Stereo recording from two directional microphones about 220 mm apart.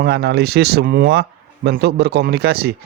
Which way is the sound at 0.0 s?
50° right (ahead or behind).